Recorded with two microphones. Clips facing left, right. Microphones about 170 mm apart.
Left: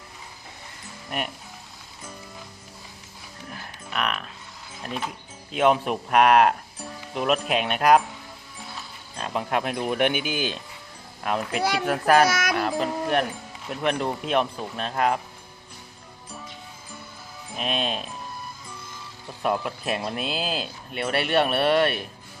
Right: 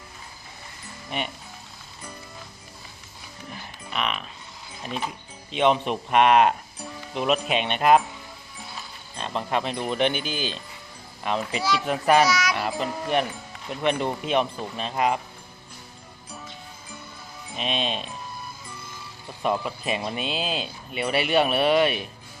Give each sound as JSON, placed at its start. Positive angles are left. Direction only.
{"t": 1.1, "sound": "speech", "side_deg": 5}
{"t": 3.4, "sound": "music", "side_deg": 0}
{"t": 4.8, "sound": "speech", "side_deg": 0}
{"t": 9.1, "sound": "speech", "side_deg": 5}
{"t": 12.2, "sound": "speech", "side_deg": 50}
{"t": 12.8, "sound": "speech", "side_deg": 0}
{"t": 17.5, "sound": "speech", "side_deg": 0}
{"t": 19.4, "sound": "speech", "side_deg": 0}